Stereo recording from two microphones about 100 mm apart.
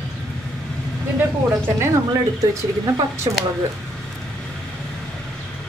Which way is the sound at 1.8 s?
30° right (ahead or behind).